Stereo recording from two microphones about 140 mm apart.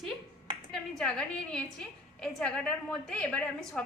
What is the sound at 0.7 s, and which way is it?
A woman's voice, 5° left (ahead or behind).